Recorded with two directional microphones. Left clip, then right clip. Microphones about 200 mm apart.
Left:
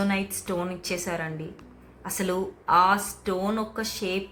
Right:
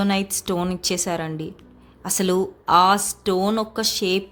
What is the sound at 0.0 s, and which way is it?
Speech, 60° right (ahead or behind).